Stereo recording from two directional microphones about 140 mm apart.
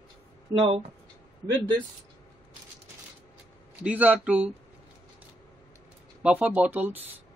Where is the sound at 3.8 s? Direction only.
10° right (ahead or behind).